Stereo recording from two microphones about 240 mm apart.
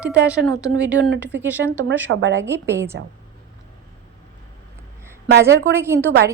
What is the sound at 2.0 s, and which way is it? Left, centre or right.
Speech, right.